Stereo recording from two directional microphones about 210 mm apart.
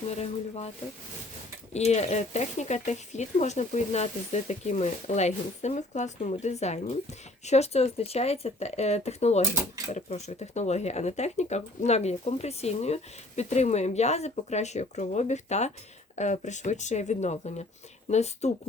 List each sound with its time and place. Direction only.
0.1 s speech: 30° left (ahead or behind)
1.7 s speech: 30° left (ahead or behind)